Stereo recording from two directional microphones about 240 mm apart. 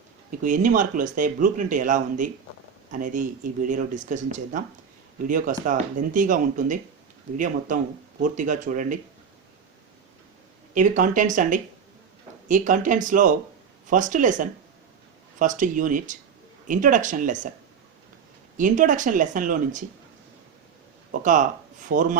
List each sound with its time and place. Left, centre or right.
0.3 s speech: right
10.8 s speech: right
18.5 s speech: right
21.1 s speech: right